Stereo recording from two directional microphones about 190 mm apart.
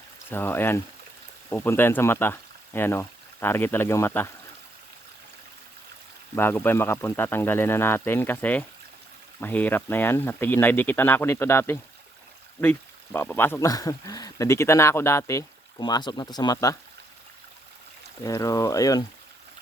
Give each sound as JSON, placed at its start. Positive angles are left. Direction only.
{"t": 0.3, "sound": "speech", "side_deg": 10}
{"t": 6.3, "sound": "speech", "side_deg": 10}
{"t": 18.2, "sound": "speech", "side_deg": 15}